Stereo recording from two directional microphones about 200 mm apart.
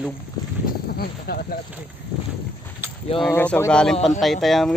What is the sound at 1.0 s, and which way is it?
Speech, 50° left (ahead or behind).